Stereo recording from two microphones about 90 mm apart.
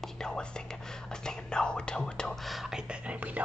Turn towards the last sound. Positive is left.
turn(degrees=-15)  # may be behind; listen again after turning